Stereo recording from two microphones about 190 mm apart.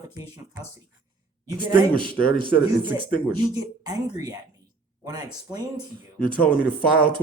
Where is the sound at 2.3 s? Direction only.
25° right (ahead or behind).